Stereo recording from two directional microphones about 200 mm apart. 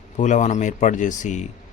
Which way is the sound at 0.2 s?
35° left (ahead or behind).